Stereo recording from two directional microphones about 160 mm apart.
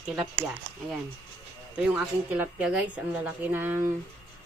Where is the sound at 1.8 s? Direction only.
10° right (ahead or behind).